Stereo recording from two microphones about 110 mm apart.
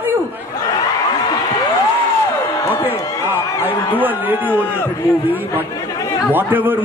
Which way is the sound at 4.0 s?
15° right (ahead or behind).